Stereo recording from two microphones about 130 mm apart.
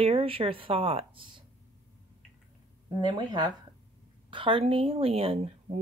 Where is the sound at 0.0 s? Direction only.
45° right (ahead or behind).